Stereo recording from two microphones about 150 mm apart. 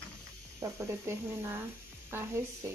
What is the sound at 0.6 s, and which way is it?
Speech, 20° right (ahead or behind).